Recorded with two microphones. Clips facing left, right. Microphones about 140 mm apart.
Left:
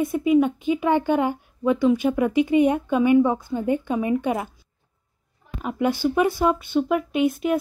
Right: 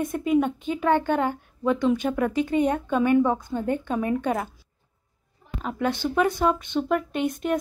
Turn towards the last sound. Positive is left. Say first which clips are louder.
# left 4 dB
turn(degrees=5)  # may be behind; listen again after turning